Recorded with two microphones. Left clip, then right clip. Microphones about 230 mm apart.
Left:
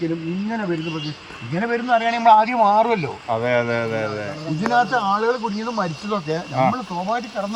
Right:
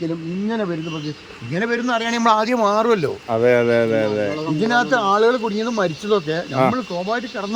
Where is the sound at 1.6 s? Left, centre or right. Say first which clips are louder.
Left 2 dB; centre.